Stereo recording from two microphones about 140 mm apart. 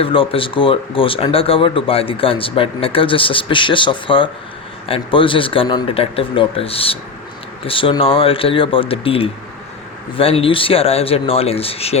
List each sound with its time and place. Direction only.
0.0 s speech: 40° left (ahead or behind)